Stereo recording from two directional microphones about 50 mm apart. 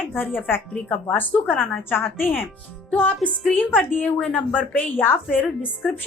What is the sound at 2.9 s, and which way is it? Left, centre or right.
A woman's voice, left.